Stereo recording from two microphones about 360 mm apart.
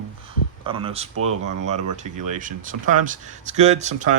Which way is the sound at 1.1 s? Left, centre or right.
Right.